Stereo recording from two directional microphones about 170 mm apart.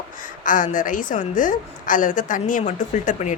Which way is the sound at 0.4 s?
50° left (ahead or behind).